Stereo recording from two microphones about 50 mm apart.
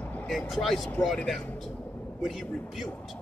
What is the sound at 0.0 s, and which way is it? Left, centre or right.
Vehicle, left.